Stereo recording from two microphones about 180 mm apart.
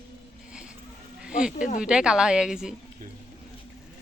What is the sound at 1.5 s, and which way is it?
Speech, 45° left (ahead or behind).